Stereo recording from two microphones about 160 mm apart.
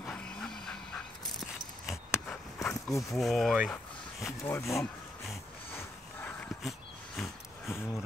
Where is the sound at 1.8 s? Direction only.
5° left (ahead or behind).